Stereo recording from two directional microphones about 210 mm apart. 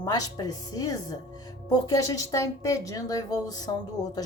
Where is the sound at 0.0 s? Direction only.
15° left (ahead or behind).